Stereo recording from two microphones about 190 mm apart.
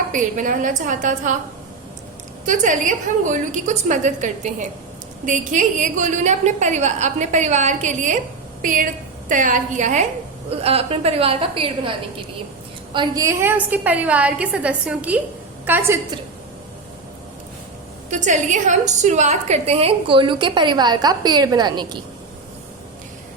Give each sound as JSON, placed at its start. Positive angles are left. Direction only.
{"t": 0.1, "sound": "a woman's voice", "side_deg": -45}
{"t": 2.5, "sound": "a woman's voice", "side_deg": -40}
{"t": 12.9, "sound": "a woman's voice", "side_deg": -20}
{"t": 18.1, "sound": "a woman's voice", "side_deg": -40}